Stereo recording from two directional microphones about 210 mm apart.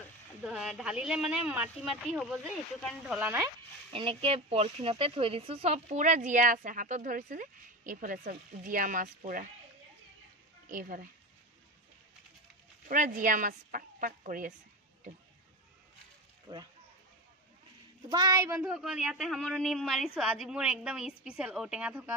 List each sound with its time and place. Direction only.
0.4 s speech: 5° right (ahead or behind)
3.2 s a child's voice: 10° right (ahead or behind)
3.9 s speech: 25° right (ahead or behind)
10.7 s speech: 40° right (ahead or behind)
12.8 s speech: 40° right (ahead or behind)
18.1 s a child's voice: 15° right (ahead or behind)
18.7 s speech: centre (ahead or behind)